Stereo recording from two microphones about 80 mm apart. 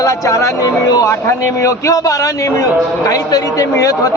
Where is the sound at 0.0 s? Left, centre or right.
Left.